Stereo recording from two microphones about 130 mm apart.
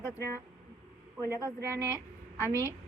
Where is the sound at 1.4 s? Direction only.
15° right (ahead or behind).